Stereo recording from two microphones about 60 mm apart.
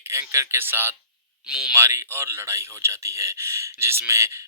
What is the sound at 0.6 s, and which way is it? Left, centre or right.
Speech, right.